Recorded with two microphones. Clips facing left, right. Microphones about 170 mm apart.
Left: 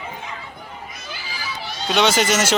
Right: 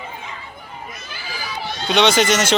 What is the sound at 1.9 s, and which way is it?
Speech, 5° left (ahead or behind).